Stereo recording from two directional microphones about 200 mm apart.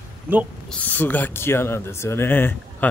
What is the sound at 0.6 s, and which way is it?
Speech, 5° left (ahead or behind).